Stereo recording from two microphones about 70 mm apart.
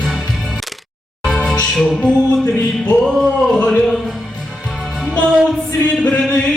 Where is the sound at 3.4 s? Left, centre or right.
Centre.